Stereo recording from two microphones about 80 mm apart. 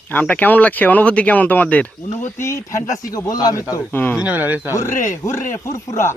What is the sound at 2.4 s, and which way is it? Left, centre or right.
Speech, left.